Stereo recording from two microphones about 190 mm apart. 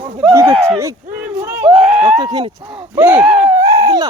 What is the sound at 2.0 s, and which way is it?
Speech, 20° right (ahead or behind).